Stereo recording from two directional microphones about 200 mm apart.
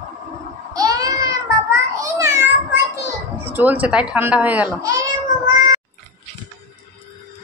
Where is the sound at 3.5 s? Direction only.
10° right (ahead or behind).